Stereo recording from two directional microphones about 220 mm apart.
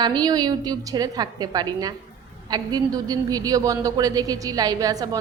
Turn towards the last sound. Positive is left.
turn(degrees=-15)  # may be behind; listen again after turning